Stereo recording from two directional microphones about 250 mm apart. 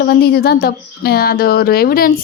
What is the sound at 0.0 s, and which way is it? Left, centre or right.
Speech, left.